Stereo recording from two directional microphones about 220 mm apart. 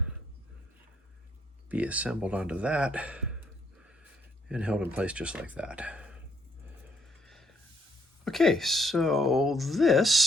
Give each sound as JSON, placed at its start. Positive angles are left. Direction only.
{"t": 1.7, "sound": "speech", "side_deg": -5}
{"t": 7.3, "sound": "a sound", "side_deg": 0}
{"t": 8.2, "sound": "speech", "side_deg": 0}